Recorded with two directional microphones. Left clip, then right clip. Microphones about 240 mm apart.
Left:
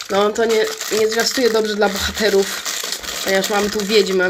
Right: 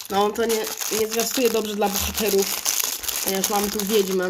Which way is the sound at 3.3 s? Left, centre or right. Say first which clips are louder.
Left 7 dB; right.